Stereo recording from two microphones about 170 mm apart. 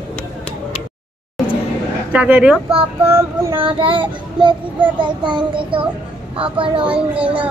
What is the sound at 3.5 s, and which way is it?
Child singing, 30° right (ahead or behind).